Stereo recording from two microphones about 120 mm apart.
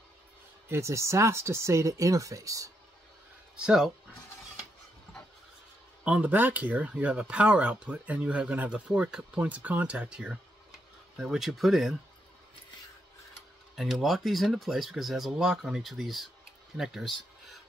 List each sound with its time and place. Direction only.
0.7 s speech: 25° right (ahead or behind)
3.5 s speech: 5° right (ahead or behind)
6.0 s speech: 10° right (ahead or behind)
13.7 s speech: centre (ahead or behind)